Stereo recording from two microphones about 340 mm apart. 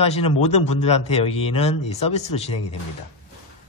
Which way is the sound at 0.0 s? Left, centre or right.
Centre.